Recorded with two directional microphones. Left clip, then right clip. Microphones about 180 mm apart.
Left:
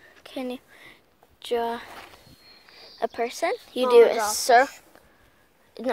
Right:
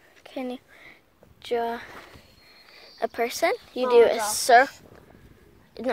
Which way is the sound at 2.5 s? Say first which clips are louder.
Left 1 dB; centre (ahead or behind).